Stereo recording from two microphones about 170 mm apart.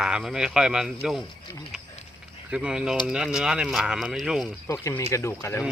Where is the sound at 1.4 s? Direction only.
25° left (ahead or behind).